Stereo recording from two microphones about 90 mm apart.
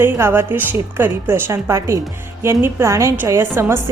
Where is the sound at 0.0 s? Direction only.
25° right (ahead or behind).